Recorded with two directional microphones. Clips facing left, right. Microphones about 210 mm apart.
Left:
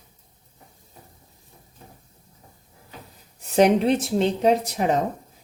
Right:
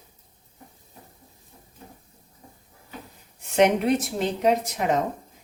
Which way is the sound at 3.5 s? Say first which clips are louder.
Left 2 dB; 30° left (ahead or behind).